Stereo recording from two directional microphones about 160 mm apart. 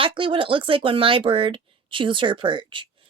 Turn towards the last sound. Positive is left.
turn(degrees=-30)  # may be behind; listen again after turning